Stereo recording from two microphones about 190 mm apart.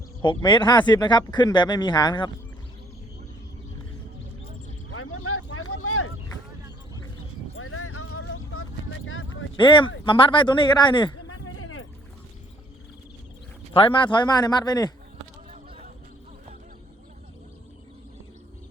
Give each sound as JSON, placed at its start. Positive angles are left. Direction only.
{"t": 0.2, "sound": "speech", "side_deg": 25}
{"t": 4.9, "sound": "vehicle", "side_deg": 90}
{"t": 7.5, "sound": "a sound", "side_deg": 90}
{"t": 9.6, "sound": "speech", "side_deg": 25}
{"t": 11.4, "sound": "a sound", "side_deg": 90}
{"t": 13.7, "sound": "speech", "side_deg": 25}